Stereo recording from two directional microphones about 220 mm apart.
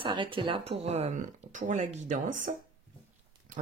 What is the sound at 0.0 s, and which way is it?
Speech, 20° right (ahead or behind).